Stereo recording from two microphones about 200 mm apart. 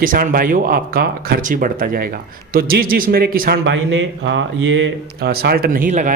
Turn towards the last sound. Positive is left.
turn(degrees=-40)  # may be behind; listen again after turning